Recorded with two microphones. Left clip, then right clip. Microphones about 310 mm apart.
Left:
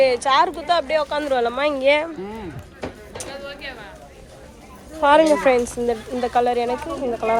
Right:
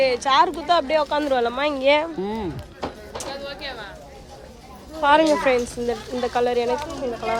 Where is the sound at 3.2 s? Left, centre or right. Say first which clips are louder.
Right 1 dB; right.